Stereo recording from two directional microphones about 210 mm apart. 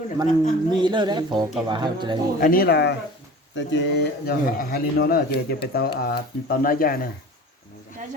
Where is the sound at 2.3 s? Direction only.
40° left (ahead or behind).